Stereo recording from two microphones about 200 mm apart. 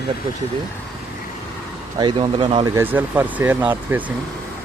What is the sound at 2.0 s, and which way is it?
Speech, 25° right (ahead or behind).